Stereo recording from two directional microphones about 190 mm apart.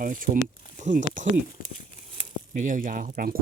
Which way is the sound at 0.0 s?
45° right (ahead or behind).